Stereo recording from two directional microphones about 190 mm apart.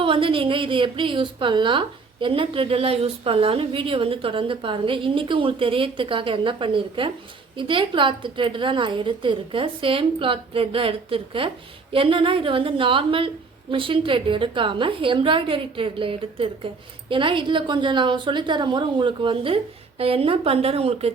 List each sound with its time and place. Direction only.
0.0 s a woman's voice: 25° right (ahead or behind)